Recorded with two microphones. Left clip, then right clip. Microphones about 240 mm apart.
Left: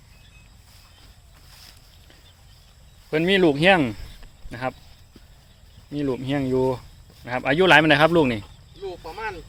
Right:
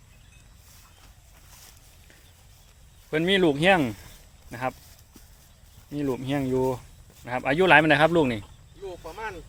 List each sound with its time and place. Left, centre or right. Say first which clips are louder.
3.1 s speech: left 3 dB; centre
5.9 s speech: left 3 dB; centre
8.8 s a sound: left 4 dB; centre